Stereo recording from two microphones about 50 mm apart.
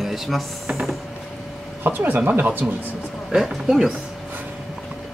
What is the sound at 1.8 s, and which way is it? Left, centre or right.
Speech, right.